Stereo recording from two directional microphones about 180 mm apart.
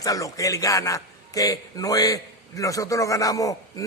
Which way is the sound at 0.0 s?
20° left (ahead or behind).